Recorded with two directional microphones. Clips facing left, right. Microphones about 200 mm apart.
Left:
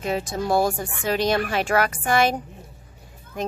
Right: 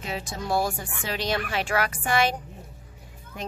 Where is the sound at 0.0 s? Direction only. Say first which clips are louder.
Left 7 dB; 45° left (ahead or behind).